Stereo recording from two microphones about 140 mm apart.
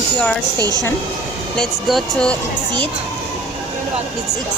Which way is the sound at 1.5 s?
5° left (ahead or behind).